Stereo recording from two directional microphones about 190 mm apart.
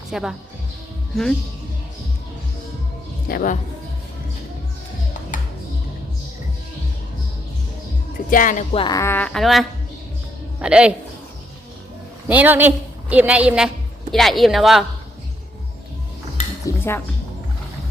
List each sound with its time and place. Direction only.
0.1 s speech: 5° right (ahead or behind)
3.2 s speech: 45° left (ahead or behind)
8.3 s speech: 45° left (ahead or behind)
8.7 s a woman's voice: 25° left (ahead or behind); by 10.9 s 5° right (ahead or behind)
12.3 s a woman's voice: 10° right (ahead or behind)
16.6 s dishes: 10° left (ahead or behind)